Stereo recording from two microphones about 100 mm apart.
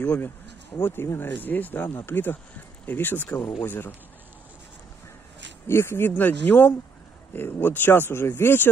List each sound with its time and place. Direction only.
0.0 s speech: 15° left (ahead or behind)
5.7 s speech: 25° left (ahead or behind)